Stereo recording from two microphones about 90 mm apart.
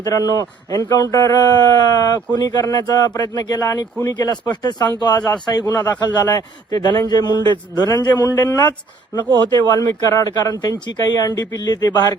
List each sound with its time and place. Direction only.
0.0 s speech: 45° left (ahead or behind)